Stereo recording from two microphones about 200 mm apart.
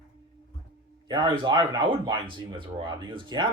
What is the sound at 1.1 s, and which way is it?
Speech, 20° right (ahead or behind).